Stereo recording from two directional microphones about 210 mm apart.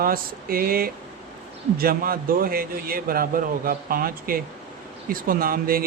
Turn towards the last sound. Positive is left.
turn(degrees=-45)  # may be behind; listen again after turning